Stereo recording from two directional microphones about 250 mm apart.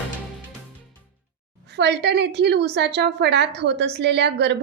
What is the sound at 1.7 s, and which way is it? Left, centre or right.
A woman's voice, right.